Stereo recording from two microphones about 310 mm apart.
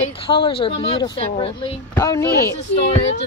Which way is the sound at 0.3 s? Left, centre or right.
Centre.